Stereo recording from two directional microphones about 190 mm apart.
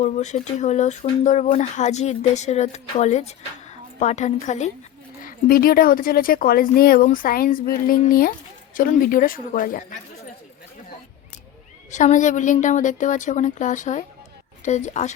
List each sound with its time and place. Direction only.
0.0 s speech: 35° left (ahead or behind)
5.2 s speech: 50° left (ahead or behind)
11.9 s speech: 40° left (ahead or behind)